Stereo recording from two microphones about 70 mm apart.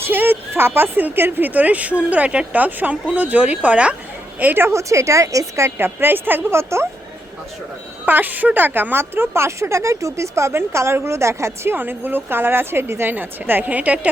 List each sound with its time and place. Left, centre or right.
0.1 s speech: right
4.4 s a woman's voice: right
5.7 s speech: right
8.0 s speech: right
11.7 s speech: right